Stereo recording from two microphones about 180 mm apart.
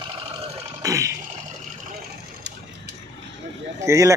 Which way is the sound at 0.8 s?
15° right (ahead or behind).